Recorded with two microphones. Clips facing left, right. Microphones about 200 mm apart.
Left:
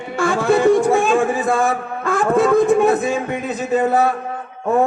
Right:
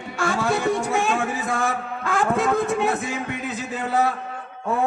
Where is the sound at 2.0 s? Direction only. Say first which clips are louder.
Left 6 dB; 50° left (ahead or behind).